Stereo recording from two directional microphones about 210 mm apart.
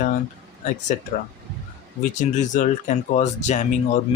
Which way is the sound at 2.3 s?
35° left (ahead or behind).